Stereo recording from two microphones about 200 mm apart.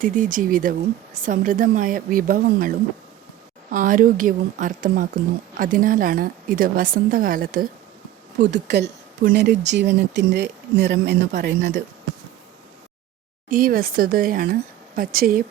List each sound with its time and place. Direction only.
0.0 s a woman's voice: 40° right (ahead or behind)
8.4 s speech: 60° right (ahead or behind)
13.5 s a woman's voice: 45° right (ahead or behind)